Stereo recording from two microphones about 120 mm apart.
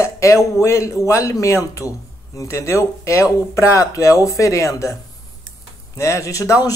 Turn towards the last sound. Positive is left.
turn(degrees=25)  # may be behind; listen again after turning